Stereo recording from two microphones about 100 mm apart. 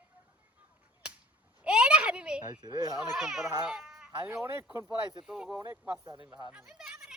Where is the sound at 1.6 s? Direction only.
15° right (ahead or behind).